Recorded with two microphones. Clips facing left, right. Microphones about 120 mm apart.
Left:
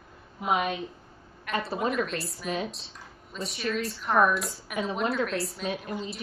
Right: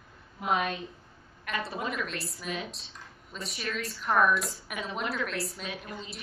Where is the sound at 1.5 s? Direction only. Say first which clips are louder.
Left 4 dB; 30° left (ahead or behind).